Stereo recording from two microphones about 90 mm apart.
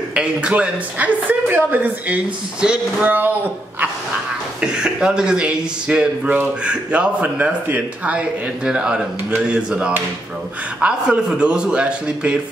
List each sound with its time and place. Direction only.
0.1 s speech: 10° right (ahead or behind)
4.6 s speech: 10° right (ahead or behind)